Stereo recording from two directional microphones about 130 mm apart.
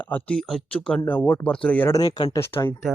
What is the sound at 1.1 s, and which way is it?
Speech, 15° left (ahead or behind).